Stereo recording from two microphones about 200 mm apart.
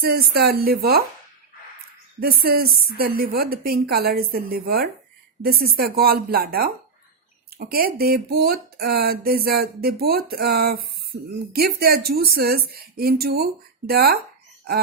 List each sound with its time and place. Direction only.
0.0 s speech: 50° right (ahead or behind)
2.2 s speech: 50° right (ahead or behind)
7.7 s speech: 50° right (ahead or behind)